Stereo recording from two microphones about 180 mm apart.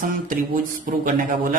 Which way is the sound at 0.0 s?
50° right (ahead or behind).